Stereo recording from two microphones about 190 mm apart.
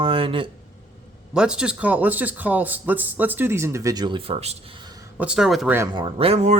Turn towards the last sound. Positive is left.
turn(degrees=-30)  # may be behind; listen again after turning